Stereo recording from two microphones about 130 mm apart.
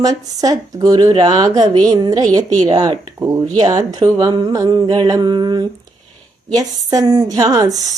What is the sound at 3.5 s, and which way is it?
Speech, 30° right (ahead or behind).